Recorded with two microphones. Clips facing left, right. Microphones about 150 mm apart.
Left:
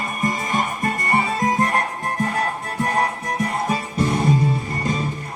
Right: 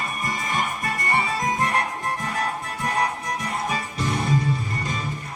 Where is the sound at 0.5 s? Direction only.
45° left (ahead or behind).